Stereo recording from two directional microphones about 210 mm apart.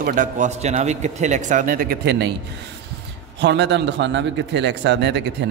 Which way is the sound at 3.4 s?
55° right (ahead or behind).